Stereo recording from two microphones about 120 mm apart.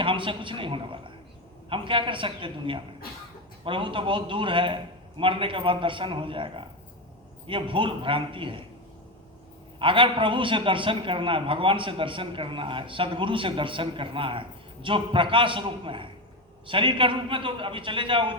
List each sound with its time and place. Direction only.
0.0 s a man's voice: 45° right (ahead or behind)
9.7 s a man's voice: 45° right (ahead or behind)